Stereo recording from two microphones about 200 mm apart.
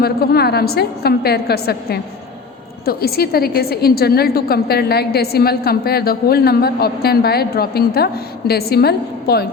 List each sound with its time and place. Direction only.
0.0 s a woman's voice: 50° left (ahead or behind)